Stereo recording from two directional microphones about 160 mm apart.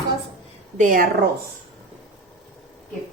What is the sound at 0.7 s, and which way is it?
Speech, 55° right (ahead or behind).